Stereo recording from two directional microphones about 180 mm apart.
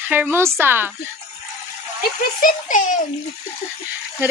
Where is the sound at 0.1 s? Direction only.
10° right (ahead or behind).